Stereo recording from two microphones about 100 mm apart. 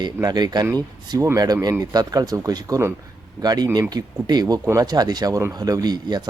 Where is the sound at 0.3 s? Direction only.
45° right (ahead or behind).